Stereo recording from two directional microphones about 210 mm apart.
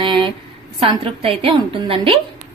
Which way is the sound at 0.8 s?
25° right (ahead or behind).